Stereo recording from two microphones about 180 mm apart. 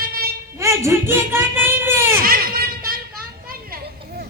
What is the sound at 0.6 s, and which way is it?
Baby cry, 15° right (ahead or behind).